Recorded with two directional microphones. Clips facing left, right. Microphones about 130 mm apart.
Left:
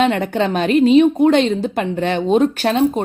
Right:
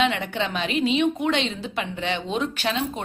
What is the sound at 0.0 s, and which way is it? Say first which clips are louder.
A woman's voice: left 7 dB; 45° left (ahead or behind).